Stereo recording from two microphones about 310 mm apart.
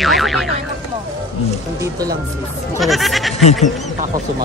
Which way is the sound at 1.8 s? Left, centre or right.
Centre.